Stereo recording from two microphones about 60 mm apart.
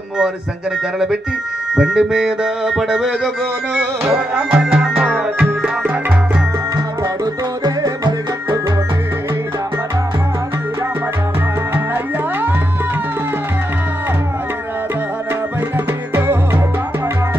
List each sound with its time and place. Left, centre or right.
1.8 s music: centre
3.7 s music: centre
11.7 s music: right